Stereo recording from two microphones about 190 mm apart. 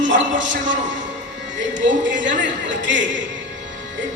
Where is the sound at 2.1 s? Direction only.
40° right (ahead or behind).